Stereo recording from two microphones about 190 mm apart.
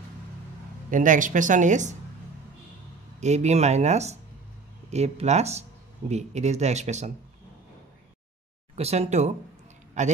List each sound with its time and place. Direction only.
0.8 s speech: 45° right (ahead or behind)
3.2 s speech: 35° right (ahead or behind)
8.7 s a man's voice: 35° right (ahead or behind)